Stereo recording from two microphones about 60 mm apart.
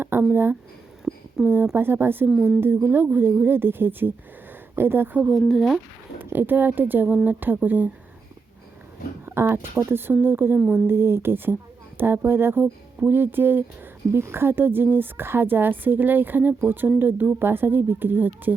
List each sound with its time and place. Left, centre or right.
0.0 s a sound: right
1.1 s a sound: centre
1.7 s a woman's voice: right
5.3 s speech: centre
6.1 s a woman's voice: right
9.2 s a woman's voice: right